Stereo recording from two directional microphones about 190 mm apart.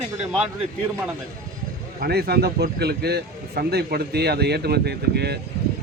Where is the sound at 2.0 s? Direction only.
55° right (ahead or behind).